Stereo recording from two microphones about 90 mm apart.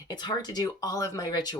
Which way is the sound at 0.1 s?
50° left (ahead or behind).